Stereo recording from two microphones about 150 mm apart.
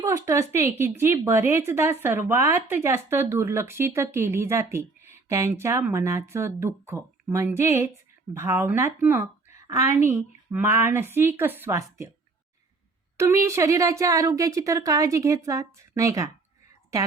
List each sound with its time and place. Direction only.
0.0 s speech: 20° right (ahead or behind)
13.1 s speech: 20° right (ahead or behind)